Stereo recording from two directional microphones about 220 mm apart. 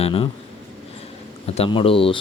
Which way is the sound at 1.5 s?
25° left (ahead or behind).